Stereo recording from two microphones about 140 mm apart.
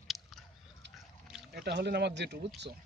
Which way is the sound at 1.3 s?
5° right (ahead or behind).